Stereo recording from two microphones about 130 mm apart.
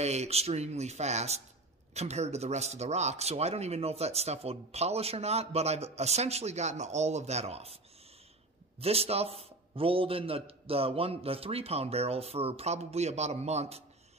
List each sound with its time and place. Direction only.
0.0 s a man's voice: 55° right (ahead or behind)